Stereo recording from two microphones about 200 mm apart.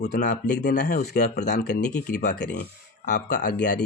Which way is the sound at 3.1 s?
55° left (ahead or behind).